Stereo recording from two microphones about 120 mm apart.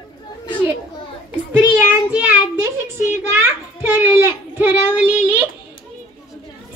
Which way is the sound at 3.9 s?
15° right (ahead or behind).